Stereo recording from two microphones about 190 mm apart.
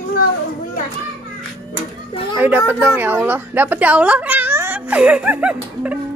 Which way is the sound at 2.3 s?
10° right (ahead or behind).